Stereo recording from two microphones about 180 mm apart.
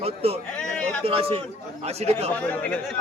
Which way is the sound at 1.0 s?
30° right (ahead or behind).